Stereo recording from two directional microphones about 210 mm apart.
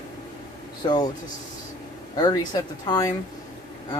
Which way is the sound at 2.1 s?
20° left (ahead or behind).